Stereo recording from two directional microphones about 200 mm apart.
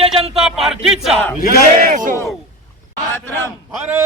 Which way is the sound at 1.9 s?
40° right (ahead or behind).